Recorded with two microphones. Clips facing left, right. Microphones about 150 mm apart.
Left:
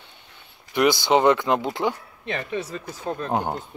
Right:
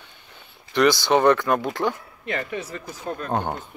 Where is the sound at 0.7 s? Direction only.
20° left (ahead or behind).